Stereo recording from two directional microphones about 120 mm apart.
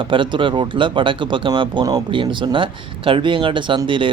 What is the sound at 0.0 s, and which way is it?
Speech, 45° right (ahead or behind).